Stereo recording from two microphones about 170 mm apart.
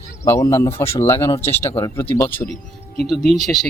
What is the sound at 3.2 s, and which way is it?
Speech, centre (ahead or behind).